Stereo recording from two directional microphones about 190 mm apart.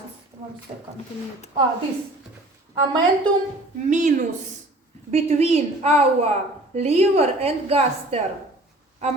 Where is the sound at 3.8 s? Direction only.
40° right (ahead or behind).